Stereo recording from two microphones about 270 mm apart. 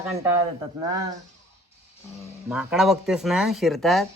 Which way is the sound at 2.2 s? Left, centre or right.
Centre.